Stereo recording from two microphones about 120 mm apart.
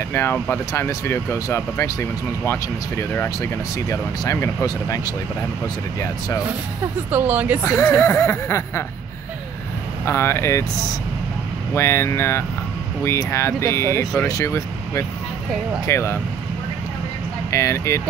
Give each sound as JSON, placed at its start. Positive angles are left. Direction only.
{"t": 0.1, "sound": "speech", "side_deg": 20}
{"t": 7.1, "sound": "speech", "side_deg": -15}
{"t": 7.6, "sound": "speech", "side_deg": 25}
{"t": 10.0, "sound": "speech", "side_deg": 20}
{"t": 11.7, "sound": "speech", "side_deg": 20}
{"t": 17.5, "sound": "speech", "side_deg": 25}